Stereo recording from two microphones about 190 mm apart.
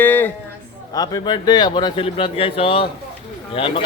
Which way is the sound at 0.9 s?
20° left (ahead or behind).